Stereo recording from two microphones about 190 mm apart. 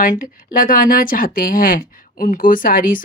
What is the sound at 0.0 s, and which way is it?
Speech, 45° left (ahead or behind).